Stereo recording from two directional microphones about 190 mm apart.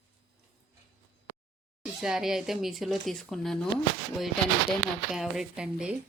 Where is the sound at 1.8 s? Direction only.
5° right (ahead or behind).